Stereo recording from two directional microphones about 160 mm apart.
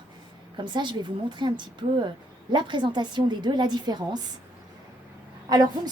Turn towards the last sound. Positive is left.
turn(degrees=-25)  # may be behind; listen again after turning